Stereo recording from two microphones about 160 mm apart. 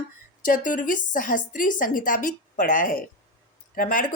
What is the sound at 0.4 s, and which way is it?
A woman's voice, 55° left (ahead or behind).